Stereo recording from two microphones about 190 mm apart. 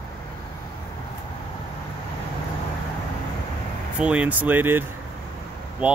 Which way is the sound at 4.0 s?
5° right (ahead or behind).